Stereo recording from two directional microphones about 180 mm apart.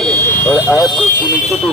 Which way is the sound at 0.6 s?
20° left (ahead or behind).